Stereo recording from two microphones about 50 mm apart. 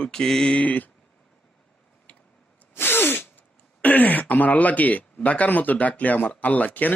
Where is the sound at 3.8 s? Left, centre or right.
Left.